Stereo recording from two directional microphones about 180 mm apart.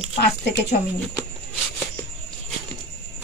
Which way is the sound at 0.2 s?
65° left (ahead or behind).